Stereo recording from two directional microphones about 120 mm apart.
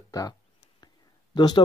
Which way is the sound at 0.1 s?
30° left (ahead or behind).